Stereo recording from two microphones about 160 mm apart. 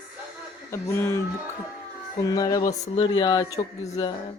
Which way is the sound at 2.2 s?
20° left (ahead or behind).